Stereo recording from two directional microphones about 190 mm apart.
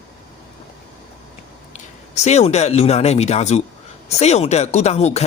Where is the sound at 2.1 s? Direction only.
35° left (ahead or behind).